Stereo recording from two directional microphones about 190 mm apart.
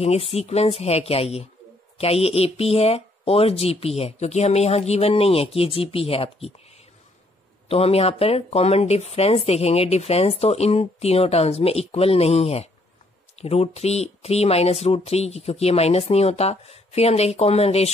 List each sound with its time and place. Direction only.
0.0 s speech: 30° left (ahead or behind)
7.6 s speech: 30° left (ahead or behind)